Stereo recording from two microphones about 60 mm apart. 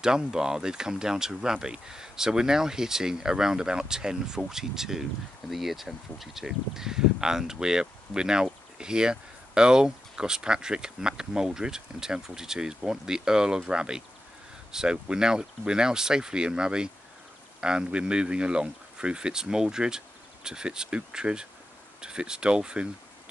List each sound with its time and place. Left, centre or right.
0.0 s speech: centre